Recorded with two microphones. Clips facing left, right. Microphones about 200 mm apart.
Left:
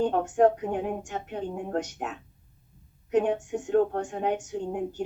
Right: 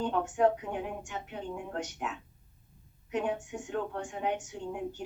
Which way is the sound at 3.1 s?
40° left (ahead or behind).